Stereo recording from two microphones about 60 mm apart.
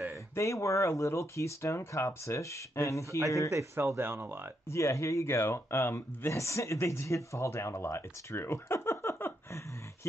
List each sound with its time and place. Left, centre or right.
0.4 s speech: left
3.7 s speech: right
4.6 s speech: left